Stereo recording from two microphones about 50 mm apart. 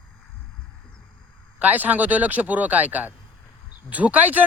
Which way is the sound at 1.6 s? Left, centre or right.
Right.